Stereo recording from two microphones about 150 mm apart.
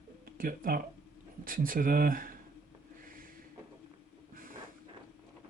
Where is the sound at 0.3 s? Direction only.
70° right (ahead or behind).